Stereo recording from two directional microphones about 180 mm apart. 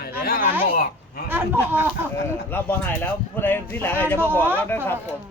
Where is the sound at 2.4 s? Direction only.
10° left (ahead or behind).